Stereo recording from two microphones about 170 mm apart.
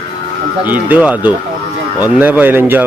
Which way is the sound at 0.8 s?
10° right (ahead or behind).